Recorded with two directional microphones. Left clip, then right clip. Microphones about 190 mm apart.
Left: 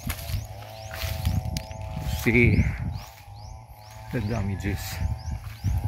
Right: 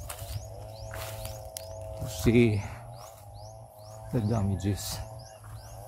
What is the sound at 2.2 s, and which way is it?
Speech, 15° right (ahead or behind).